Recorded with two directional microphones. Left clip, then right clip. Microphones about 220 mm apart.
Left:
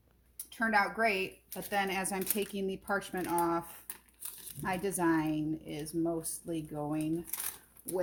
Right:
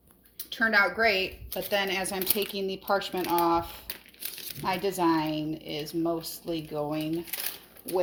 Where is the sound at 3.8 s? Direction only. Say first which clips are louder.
Right 10 dB; 15° left (ahead or behind).